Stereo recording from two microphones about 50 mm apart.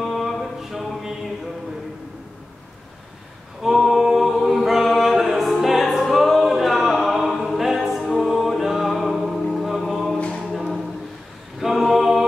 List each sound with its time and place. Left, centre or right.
0.0 s a sound: centre
3.6 s a capella: centre
7.4 s choir: centre
8.2 s music: centre
10.1 s a capella: centre
11.6 s a capella: centre